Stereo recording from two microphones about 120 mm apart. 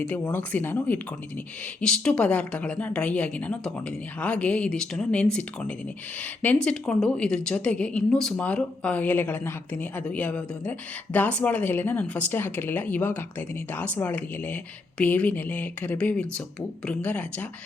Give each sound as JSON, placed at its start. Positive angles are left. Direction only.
{"t": 0.1, "sound": "a woman's voice", "side_deg": 15}